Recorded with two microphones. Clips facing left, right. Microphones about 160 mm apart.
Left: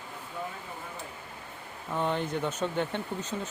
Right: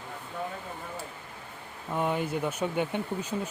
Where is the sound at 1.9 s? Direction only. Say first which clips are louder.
Right 1 dB; 10° right (ahead or behind).